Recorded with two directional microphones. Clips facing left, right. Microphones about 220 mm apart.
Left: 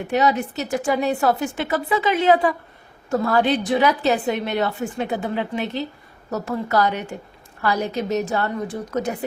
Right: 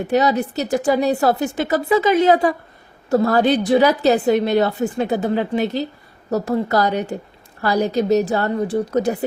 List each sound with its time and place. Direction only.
0.1 s a woman's voice: 35° right (ahead or behind)